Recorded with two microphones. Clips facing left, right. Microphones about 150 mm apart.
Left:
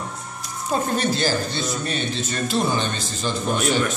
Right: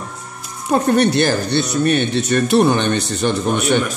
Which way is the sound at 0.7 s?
65° right (ahead or behind).